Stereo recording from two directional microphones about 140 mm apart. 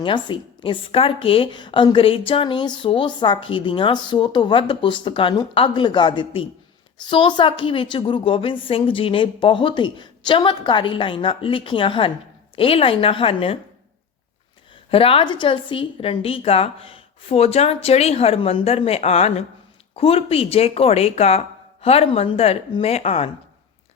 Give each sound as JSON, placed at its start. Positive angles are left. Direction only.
{"t": 0.0, "sound": "a woman's voice", "side_deg": 35}
{"t": 14.8, "sound": "a woman's voice", "side_deg": 40}